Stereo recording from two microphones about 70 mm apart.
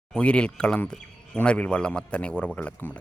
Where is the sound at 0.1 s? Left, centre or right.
Centre.